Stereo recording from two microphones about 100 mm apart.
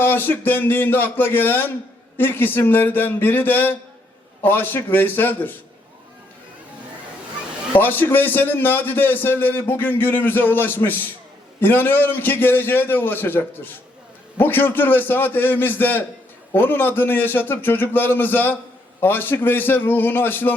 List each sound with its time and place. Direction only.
0.0 s a man's voice: 20° left (ahead or behind)
7.8 s a man's voice: 20° left (ahead or behind)